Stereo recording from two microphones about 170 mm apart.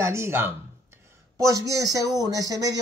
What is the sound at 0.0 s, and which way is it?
Speech, 15° right (ahead or behind).